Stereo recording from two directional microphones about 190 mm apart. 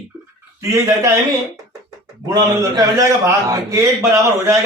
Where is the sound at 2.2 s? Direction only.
20° right (ahead or behind).